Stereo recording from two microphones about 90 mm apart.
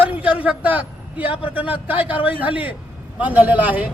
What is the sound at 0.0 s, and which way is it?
A man's voice, 15° right (ahead or behind).